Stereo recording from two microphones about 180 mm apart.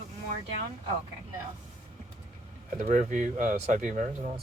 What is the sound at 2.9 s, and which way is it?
Speech, 45° right (ahead or behind).